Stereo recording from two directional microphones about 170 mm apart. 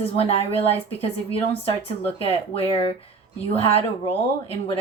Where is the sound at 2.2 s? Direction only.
35° left (ahead or behind).